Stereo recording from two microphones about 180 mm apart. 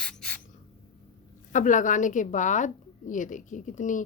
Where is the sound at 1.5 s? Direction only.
45° left (ahead or behind).